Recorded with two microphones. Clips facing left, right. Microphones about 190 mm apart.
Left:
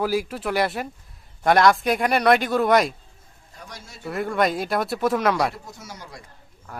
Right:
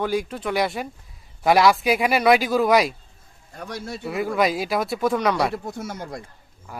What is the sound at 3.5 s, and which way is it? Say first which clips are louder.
Speech: right 11 dB; 60° right (ahead or behind).